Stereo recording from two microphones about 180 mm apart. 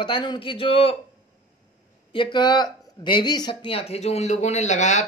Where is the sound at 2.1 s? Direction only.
25° left (ahead or behind).